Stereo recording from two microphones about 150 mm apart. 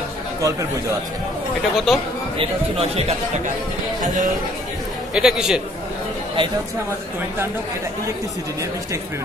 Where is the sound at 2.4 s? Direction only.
40° right (ahead or behind).